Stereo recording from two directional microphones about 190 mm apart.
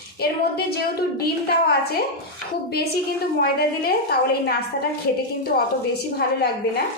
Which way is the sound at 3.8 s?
55° left (ahead or behind).